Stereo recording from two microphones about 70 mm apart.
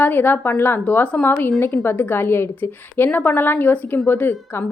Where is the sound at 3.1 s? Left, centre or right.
Left.